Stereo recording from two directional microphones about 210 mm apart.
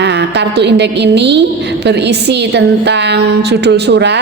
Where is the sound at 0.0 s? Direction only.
55° right (ahead or behind).